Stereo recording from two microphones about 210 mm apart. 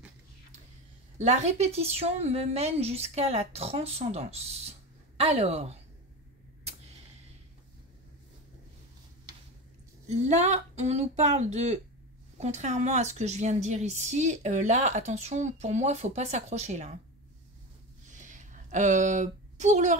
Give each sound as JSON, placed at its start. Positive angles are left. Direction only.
{"t": 1.1, "sound": "a woman's voice", "side_deg": -35}
{"t": 10.0, "sound": "a woman's voice", "side_deg": -30}
{"t": 18.1, "sound": "a sound", "side_deg": -35}